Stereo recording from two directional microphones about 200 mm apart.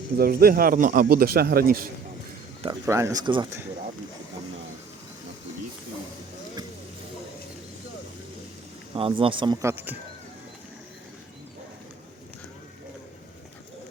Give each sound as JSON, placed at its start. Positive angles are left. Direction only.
{"t": 0.2, "sound": "speech", "side_deg": -50}
{"t": 2.8, "sound": "speech", "side_deg": -15}
{"t": 9.0, "sound": "speech", "side_deg": -25}